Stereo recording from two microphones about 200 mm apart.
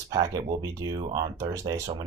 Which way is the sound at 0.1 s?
20° right (ahead or behind).